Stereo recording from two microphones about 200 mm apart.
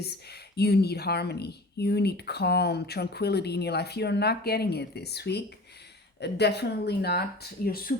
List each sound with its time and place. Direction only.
0.0 s speech: 55° left (ahead or behind)